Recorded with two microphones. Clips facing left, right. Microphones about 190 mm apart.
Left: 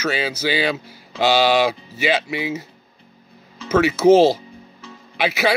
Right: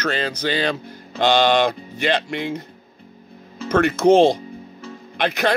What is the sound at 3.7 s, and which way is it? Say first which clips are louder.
Speech: left 1 dB; 5° left (ahead or behind).